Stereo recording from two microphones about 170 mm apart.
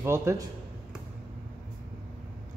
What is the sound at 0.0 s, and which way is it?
Speech, 15° right (ahead or behind).